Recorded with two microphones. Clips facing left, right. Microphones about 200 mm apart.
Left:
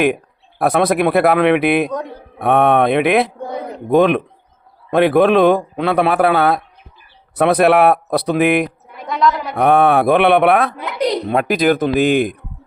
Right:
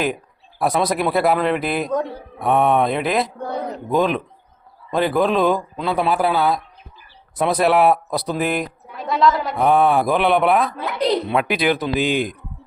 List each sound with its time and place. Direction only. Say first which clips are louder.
0.6 s a man's voice: left 5 dB; 60° left (ahead or behind)
3.4 s a sound: even; 10° left (ahead or behind)
3.8 s a man's voice: left 7 dB; 65° left (ahead or behind)
9.0 s a woman's voice: even; centre (ahead or behind)
9.6 s speech: left 5 dB; 65° left (ahead or behind)
11.3 s speech: left 4 dB; 45° left (ahead or behind)